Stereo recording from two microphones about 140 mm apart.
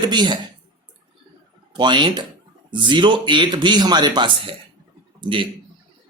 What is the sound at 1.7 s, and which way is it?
Speech, 35° right (ahead or behind).